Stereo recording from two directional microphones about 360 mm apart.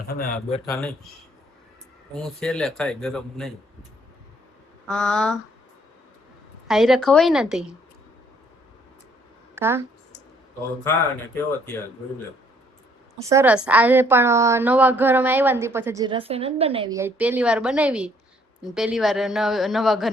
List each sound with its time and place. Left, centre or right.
0.1 s a man's voice: left
0.6 s a woman's voice: centre
2.2 s a woman's voice: centre
4.9 s a woman's voice: centre
6.7 s a woman's voice: centre
9.6 s a sound: centre
13.2 s a woman's voice: centre